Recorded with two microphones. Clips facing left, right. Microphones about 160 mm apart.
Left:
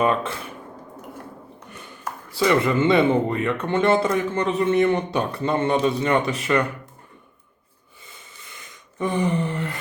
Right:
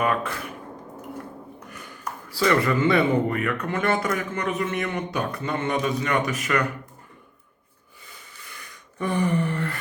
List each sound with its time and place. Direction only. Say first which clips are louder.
0.0 s speech: left 3 dB; 25° left (ahead or behind)
1.7 s speech: left 2 dB; 25° left (ahead or behind)
8.0 s a sound: even; 25° left (ahead or behind)